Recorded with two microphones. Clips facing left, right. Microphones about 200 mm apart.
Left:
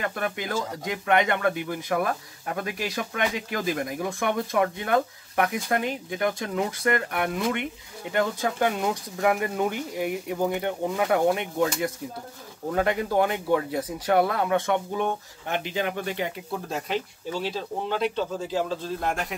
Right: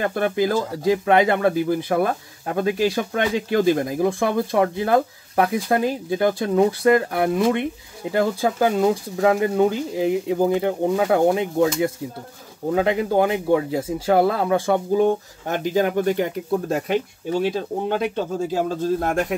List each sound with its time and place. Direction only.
0.0 s speech: 30° right (ahead or behind)